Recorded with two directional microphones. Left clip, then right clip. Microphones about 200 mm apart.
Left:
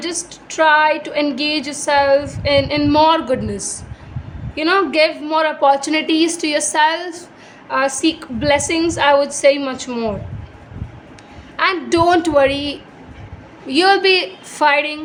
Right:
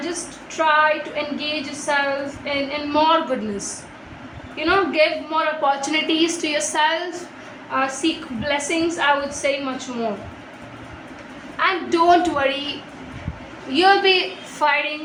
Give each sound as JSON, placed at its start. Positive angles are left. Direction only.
{"t": 0.0, "sound": "a woman's voice", "side_deg": 60}
{"t": 11.5, "sound": "a woman's voice", "side_deg": 60}
{"t": 13.7, "sound": "a woman's voice", "side_deg": 55}